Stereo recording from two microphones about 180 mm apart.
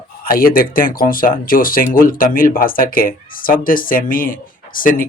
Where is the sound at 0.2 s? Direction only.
55° left (ahead or behind).